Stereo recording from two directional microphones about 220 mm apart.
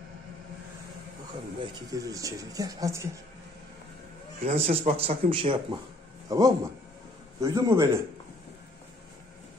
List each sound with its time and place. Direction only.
1.6 s speech: 15° right (ahead or behind)
4.4 s a man's voice: 30° right (ahead or behind); by 8.0 s 15° right (ahead or behind)